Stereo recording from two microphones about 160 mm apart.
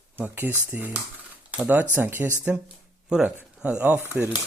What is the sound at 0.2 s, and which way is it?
Speech, 15° right (ahead or behind).